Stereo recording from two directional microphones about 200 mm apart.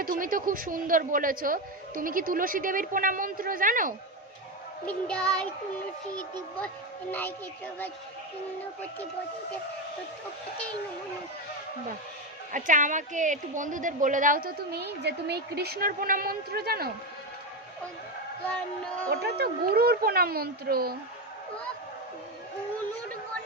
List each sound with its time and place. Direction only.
0.0 s a woman's voice: 45° right (ahead or behind)
4.9 s child singing: 5° left (ahead or behind)
7.1 s child singing: 10° left (ahead or behind)
12.5 s a woman's voice: 40° right (ahead or behind)
19.1 s a woman's voice: 55° right (ahead or behind)